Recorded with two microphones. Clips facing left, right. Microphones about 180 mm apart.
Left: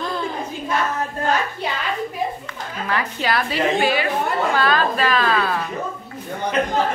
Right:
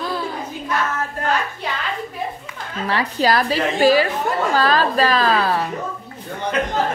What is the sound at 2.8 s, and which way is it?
A woman's voice, 35° right (ahead or behind).